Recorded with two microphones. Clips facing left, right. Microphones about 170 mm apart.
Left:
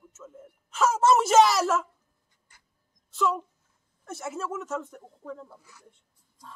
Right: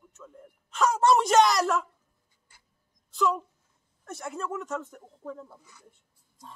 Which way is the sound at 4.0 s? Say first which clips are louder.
Left 1 dB; centre (ahead or behind).